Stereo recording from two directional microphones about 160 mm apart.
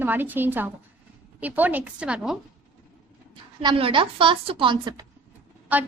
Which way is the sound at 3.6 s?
35° right (ahead or behind).